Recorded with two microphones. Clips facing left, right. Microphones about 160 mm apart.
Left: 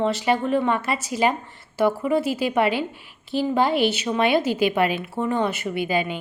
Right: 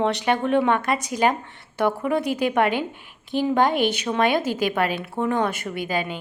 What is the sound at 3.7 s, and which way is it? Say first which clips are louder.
A woman's voice: left 1 dB; 50° right (ahead or behind).